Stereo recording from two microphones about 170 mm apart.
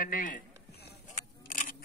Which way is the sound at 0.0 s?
50° left (ahead or behind).